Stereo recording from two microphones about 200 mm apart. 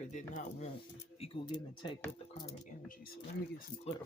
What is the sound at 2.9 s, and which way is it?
Speech, 45° left (ahead or behind).